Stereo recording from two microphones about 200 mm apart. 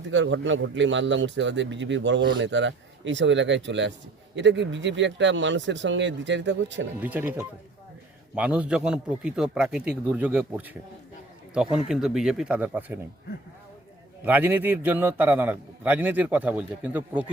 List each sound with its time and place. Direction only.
0.1 s a man's voice: 65° right (ahead or behind)
7.0 s a man's voice: 10° right (ahead or behind)
14.3 s a man's voice: 10° right (ahead or behind)